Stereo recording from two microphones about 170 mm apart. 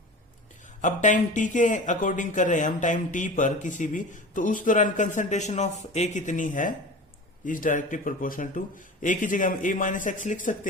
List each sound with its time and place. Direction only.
0.8 s speech: 45° left (ahead or behind)